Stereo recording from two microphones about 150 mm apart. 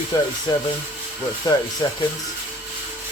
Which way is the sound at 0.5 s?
25° left (ahead or behind).